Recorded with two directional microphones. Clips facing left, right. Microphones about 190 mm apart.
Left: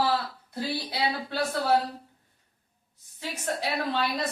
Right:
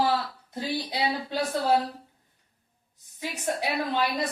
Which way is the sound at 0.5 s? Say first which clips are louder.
Right 1 dB; 20° right (ahead or behind).